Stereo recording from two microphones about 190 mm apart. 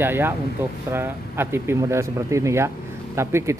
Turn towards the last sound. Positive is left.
turn(degrees=-15)  # may be behind; listen again after turning